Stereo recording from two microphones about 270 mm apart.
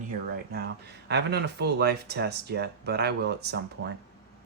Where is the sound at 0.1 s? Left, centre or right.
Right.